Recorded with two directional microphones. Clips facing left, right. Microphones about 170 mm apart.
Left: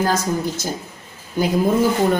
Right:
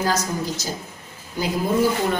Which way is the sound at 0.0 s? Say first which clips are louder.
Left 4 dB; 55° left (ahead or behind).